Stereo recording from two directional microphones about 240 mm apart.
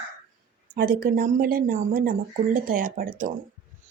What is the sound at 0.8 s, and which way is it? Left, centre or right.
Speech, right.